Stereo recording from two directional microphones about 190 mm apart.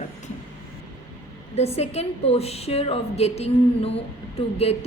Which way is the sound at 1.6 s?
35° left (ahead or behind).